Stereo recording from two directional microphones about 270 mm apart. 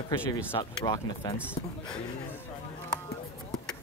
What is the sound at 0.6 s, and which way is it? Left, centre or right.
A man's voice, centre.